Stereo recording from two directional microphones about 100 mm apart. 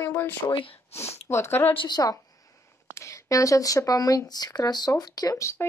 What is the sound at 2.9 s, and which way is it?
Speech, 30° left (ahead or behind).